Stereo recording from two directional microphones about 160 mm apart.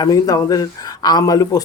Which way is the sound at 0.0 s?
25° left (ahead or behind).